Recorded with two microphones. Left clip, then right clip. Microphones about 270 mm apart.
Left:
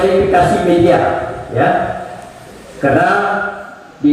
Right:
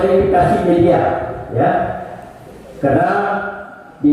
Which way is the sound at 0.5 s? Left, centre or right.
Centre.